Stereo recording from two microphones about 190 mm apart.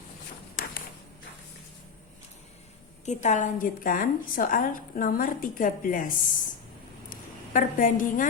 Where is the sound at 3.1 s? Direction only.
40° left (ahead or behind).